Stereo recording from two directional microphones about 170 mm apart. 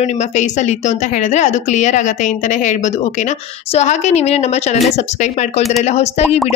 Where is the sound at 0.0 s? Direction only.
45° left (ahead or behind).